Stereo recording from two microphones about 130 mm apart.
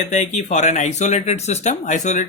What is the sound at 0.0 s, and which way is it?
Speech, 70° left (ahead or behind).